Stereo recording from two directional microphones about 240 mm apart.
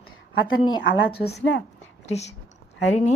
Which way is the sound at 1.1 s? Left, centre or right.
Left.